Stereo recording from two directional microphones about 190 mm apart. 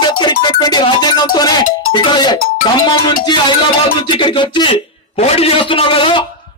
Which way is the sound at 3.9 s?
25° left (ahead or behind).